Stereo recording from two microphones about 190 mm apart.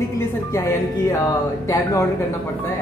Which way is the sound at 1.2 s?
15° left (ahead or behind).